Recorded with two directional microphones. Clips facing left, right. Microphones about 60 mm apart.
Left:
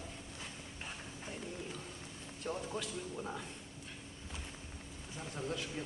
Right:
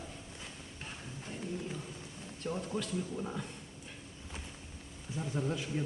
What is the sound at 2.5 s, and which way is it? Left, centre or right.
A man's voice, centre.